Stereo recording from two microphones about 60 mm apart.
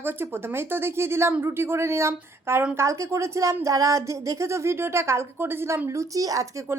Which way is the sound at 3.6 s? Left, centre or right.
Right.